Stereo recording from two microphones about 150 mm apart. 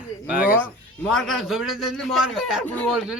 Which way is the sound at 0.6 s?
5° left (ahead or behind).